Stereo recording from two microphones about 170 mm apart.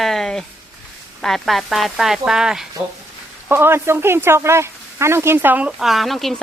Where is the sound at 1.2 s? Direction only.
Centre (ahead or behind).